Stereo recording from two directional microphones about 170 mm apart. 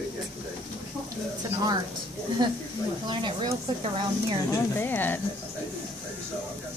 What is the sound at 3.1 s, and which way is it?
Speech, 30° right (ahead or behind).